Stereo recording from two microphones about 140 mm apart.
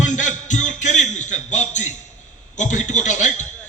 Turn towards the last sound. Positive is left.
turn(degrees=60)  # may be behind; listen again after turning